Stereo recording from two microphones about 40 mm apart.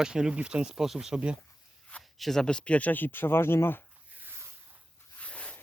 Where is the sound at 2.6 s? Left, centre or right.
Left.